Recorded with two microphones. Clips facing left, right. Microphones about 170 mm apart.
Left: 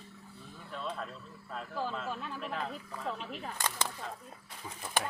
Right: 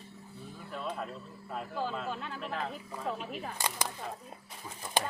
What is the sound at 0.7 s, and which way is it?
Speech, 5° right (ahead or behind).